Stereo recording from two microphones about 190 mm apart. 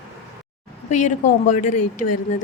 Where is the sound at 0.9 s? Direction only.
40° left (ahead or behind).